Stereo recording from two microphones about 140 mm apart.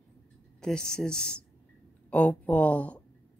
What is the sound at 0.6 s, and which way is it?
Speech, 5° left (ahead or behind).